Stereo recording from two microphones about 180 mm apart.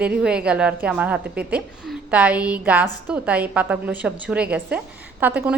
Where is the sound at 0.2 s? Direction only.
5° right (ahead or behind).